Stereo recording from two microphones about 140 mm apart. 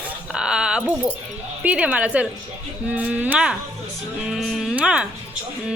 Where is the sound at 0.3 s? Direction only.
5° right (ahead or behind).